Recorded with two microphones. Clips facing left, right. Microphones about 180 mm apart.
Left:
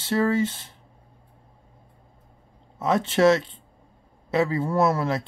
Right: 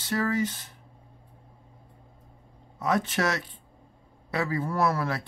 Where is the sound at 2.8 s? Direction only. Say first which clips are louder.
Left 6 dB; 25° left (ahead or behind).